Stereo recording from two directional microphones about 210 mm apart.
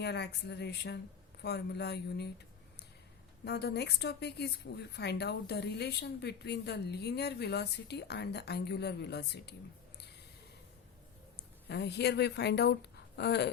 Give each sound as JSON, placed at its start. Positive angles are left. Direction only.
{"t": 0.0, "sound": "a woman's voice", "side_deg": 55}
{"t": 3.4, "sound": "a woman's voice", "side_deg": 50}
{"t": 11.3, "sound": "a woman's voice", "side_deg": 50}